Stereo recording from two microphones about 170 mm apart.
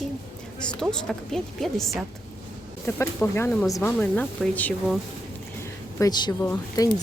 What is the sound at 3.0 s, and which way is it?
A woman's voice, 15° left (ahead or behind).